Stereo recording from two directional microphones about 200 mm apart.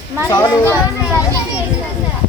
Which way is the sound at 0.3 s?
15° left (ahead or behind).